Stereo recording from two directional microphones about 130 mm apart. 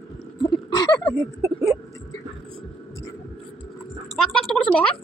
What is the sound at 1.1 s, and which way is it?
Speech, 25° right (ahead or behind).